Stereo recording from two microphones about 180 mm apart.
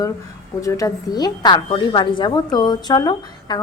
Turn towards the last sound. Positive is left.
turn(degrees=25)  # may be behind; listen again after turning